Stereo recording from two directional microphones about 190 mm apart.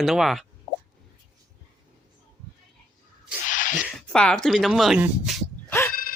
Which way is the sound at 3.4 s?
45° left (ahead or behind).